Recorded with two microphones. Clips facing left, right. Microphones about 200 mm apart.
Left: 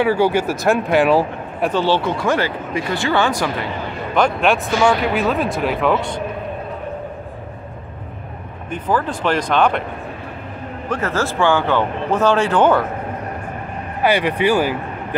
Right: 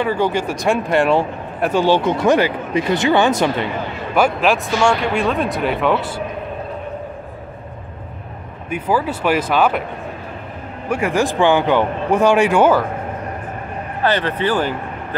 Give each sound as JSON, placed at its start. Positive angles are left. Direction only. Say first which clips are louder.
{"t": 0.0, "sound": "speech", "louder": "left 2 dB", "side_deg": 10}
{"t": 1.7, "sound": "speech", "louder": "right 3 dB", "side_deg": -15}
{"t": 4.1, "sound": "speech", "louder": "right 1 dB", "side_deg": -5}
{"t": 8.6, "sound": "a man's voice", "louder": "right 1 dB", "side_deg": -10}
{"t": 10.9, "sound": "a man's voice", "louder": "right 3 dB", "side_deg": -15}
{"t": 14.0, "sound": "speech", "louder": "left 2 dB", "side_deg": 10}